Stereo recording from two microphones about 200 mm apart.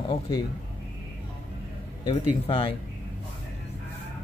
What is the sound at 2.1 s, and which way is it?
Speech, 25° left (ahead or behind).